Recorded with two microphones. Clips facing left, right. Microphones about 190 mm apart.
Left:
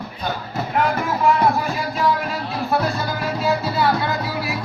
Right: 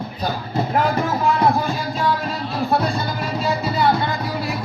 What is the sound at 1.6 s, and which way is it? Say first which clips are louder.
Music: even; 30° right (ahead or behind).